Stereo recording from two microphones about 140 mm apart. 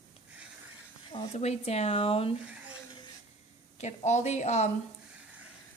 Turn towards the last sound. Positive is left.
turn(degrees=55)  # may be behind; listen again after turning